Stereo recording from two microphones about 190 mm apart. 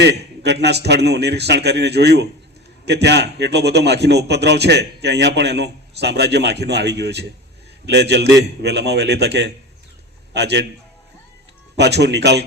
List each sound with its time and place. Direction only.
0.0 s a man's voice: 65° right (ahead or behind)
11.8 s a man's voice: 60° right (ahead or behind)